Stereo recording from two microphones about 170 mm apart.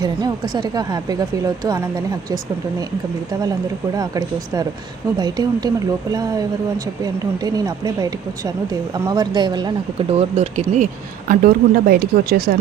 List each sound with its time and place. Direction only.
0.0 s speech: 25° right (ahead or behind)
3.9 s speech: 25° right (ahead or behind); by 10.8 s 40° right (ahead or behind)
11.3 s speech: 55° right (ahead or behind)